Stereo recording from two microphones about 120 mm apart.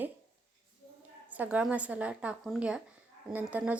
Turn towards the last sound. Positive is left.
turn(degrees=-10)  # may be behind; listen again after turning